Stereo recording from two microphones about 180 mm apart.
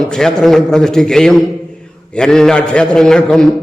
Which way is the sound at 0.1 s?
5° left (ahead or behind).